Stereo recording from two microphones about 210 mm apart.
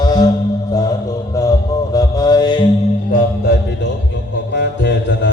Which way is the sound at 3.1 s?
45° left (ahead or behind).